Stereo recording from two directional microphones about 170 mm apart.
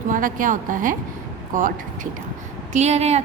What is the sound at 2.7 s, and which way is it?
Speech, 40° right (ahead or behind).